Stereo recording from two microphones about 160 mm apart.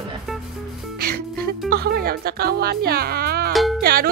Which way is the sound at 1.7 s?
75° right (ahead or behind).